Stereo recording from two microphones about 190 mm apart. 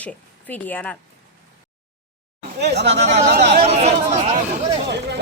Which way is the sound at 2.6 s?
60° right (ahead or behind).